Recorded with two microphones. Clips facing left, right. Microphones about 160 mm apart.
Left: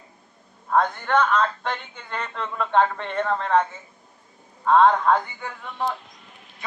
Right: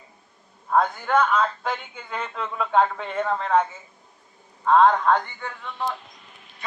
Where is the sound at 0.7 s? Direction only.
5° right (ahead or behind).